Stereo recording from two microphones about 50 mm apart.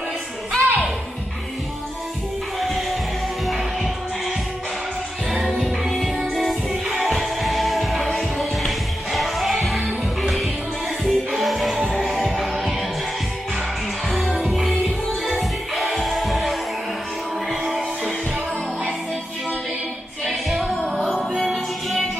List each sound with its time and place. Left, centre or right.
0.6 s music: right
2.6 s music: centre
5.6 s music: centre
6.7 s music: centre
14.0 s music: centre
20.2 s music: centre